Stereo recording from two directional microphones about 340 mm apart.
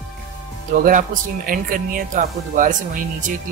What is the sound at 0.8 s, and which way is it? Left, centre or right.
Speech, right.